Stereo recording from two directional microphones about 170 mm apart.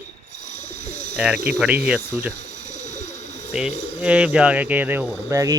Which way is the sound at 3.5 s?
5° right (ahead or behind).